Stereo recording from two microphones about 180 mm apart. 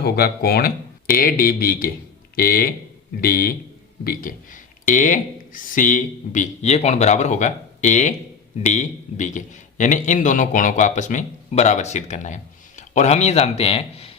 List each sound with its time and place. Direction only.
0.0 s a man's voice: 60° left (ahead or behind); by 14.1 s 35° left (ahead or behind)